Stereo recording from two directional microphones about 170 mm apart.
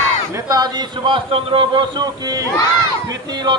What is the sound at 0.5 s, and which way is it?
A man's voice, 25° right (ahead or behind).